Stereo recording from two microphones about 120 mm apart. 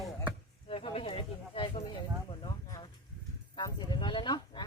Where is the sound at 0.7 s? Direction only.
50° left (ahead or behind).